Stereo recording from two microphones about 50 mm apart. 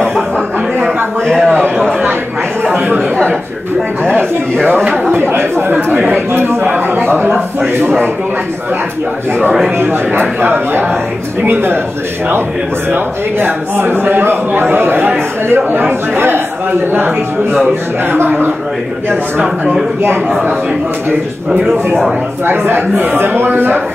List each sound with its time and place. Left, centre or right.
0.8 s a sound: centre
5.3 s a man's voice: right
6.6 s a man's voice: right
9.8 s a man's voice: right
12.9 s a man's voice: right
21.5 s a man's voice: centre
22.5 s a man's voice: right